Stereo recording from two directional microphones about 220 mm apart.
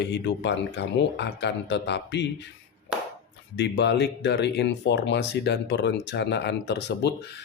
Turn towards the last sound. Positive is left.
turn(degrees=50)  # may be behind; listen again after turning